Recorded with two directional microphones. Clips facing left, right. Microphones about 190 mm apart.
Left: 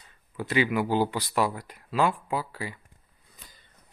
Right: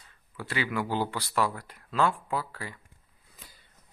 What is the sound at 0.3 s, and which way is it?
Speech, 15° left (ahead or behind).